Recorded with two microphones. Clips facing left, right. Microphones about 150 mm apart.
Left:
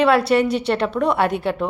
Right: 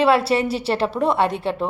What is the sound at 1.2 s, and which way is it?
Speech, centre (ahead or behind).